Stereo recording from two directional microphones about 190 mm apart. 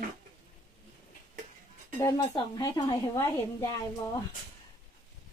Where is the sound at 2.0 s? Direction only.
20° left (ahead or behind).